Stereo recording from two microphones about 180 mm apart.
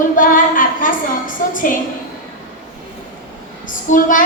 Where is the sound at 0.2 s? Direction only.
50° left (ahead or behind).